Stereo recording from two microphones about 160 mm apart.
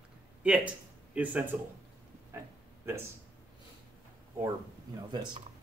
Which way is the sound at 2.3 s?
15° right (ahead or behind).